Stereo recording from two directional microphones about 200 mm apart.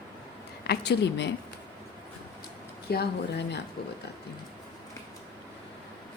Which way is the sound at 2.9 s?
55° left (ahead or behind).